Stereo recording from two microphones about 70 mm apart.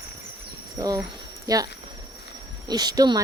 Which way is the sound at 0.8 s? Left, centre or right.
Right.